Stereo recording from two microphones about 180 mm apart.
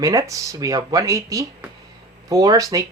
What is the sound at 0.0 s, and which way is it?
Speech, 20° right (ahead or behind).